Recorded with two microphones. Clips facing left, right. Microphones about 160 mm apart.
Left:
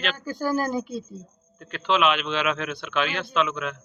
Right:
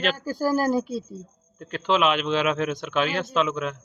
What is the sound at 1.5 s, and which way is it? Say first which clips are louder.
A man's voice: right 1 dB; 40° right (ahead or behind).